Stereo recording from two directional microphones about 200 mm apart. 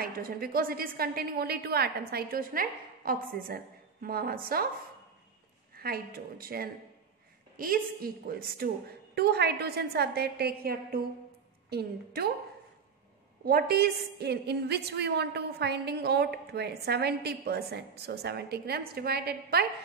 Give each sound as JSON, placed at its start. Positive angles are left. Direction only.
{"t": 0.0, "sound": "a woman's voice", "side_deg": -45}
{"t": 5.8, "sound": "a woman's voice", "side_deg": -50}
{"t": 13.5, "sound": "a woman's voice", "side_deg": -50}